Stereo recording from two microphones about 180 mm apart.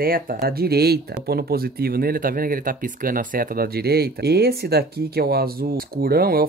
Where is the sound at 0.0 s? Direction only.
55° right (ahead or behind).